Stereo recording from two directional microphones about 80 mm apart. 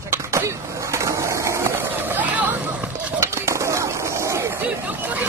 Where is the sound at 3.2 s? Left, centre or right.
Right.